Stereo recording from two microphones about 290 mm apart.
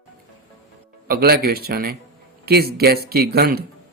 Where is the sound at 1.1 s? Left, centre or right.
Right.